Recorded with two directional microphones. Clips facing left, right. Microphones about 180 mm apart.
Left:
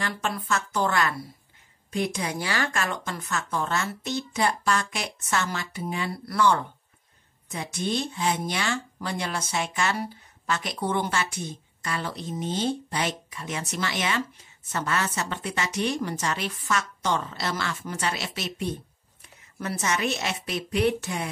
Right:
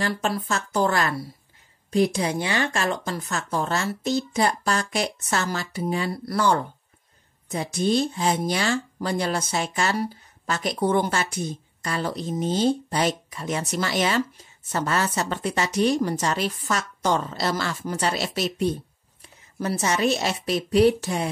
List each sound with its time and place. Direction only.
0.0 s speech: 35° right (ahead or behind)
2.3 s speech: 20° right (ahead or behind)